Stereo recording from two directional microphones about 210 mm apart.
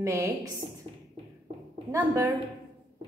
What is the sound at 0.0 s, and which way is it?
Speech, 15° right (ahead or behind).